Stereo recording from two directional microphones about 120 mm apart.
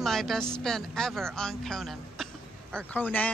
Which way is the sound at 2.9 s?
15° left (ahead or behind).